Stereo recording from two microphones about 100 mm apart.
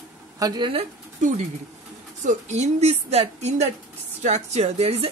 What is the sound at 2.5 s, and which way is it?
Speech, 90° right.